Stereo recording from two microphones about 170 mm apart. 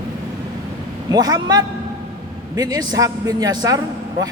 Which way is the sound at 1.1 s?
25° right (ahead or behind).